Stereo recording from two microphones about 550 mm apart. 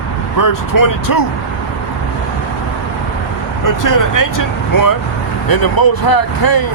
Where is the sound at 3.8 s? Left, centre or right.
Left.